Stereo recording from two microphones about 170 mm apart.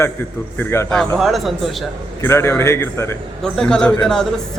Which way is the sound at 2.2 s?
15° left (ahead or behind).